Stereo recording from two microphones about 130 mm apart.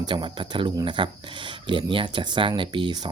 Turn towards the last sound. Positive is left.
turn(degrees=-35)  # may be behind; listen again after turning